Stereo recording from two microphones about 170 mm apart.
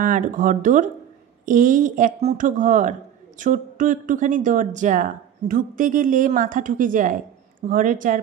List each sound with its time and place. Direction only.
0.0 s speech: 50° right (ahead or behind)